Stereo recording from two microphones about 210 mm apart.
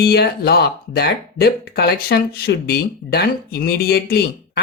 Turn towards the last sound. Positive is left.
turn(degrees=50)  # may be behind; listen again after turning